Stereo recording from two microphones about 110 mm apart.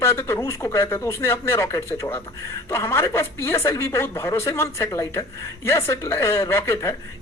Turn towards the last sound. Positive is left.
turn(degrees=25)  # may be behind; listen again after turning